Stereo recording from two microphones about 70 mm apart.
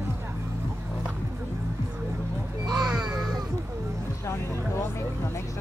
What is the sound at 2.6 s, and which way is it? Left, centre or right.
Music, right.